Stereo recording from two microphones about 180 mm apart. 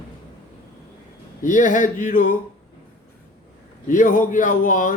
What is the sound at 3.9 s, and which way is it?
A man's voice, 45° left (ahead or behind).